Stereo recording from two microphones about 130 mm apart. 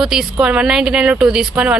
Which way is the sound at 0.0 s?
5° right (ahead or behind).